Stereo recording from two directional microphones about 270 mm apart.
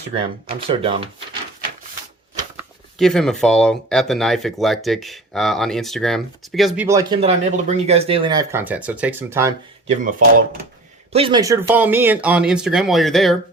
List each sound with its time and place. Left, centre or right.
0.7 s speech: centre
2.6 s speech: centre
7.2 s speech: right
10.0 s speech: right
11.1 s speech: centre